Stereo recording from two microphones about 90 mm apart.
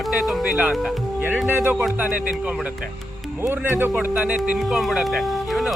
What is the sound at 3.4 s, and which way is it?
Speech, 25° right (ahead or behind).